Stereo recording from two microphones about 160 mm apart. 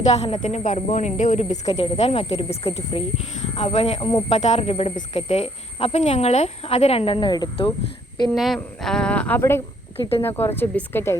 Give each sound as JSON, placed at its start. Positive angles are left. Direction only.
{"t": 0.0, "sound": "speech", "side_deg": 40}
{"t": 8.3, "sound": "a woman's voice", "side_deg": 0}
{"t": 10.0, "sound": "speech", "side_deg": 35}
{"t": 10.2, "sound": "speech", "side_deg": 15}